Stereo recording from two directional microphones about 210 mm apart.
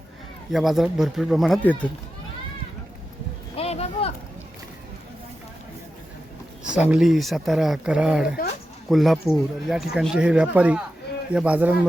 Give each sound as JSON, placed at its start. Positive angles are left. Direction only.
{"t": 0.5, "sound": "speech", "side_deg": 0}
{"t": 3.5, "sound": "a sound", "side_deg": 30}
{"t": 6.7, "sound": "a man's voice", "side_deg": -5}